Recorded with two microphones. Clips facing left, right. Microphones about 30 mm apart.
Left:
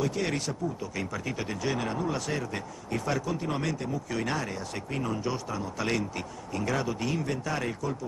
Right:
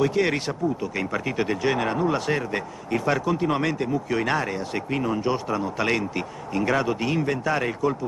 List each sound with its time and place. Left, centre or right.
0.0 s speech: right